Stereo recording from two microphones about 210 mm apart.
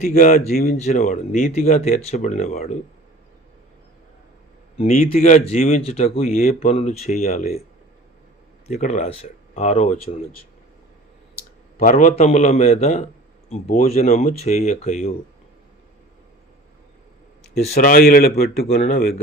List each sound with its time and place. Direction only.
0.0 s speech: 40° left (ahead or behind)
5.1 s speech: 35° left (ahead or behind)
6.2 s speech: 40° left (ahead or behind)
8.6 s speech: 30° left (ahead or behind)
11.8 s speech: 40° left (ahead or behind)
17.5 s speech: 40° left (ahead or behind)